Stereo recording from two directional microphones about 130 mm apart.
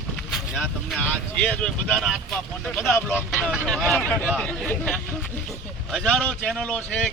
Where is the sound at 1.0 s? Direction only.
10° left (ahead or behind).